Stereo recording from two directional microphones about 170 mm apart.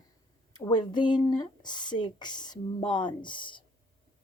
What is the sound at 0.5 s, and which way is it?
Speech, 25° left (ahead or behind).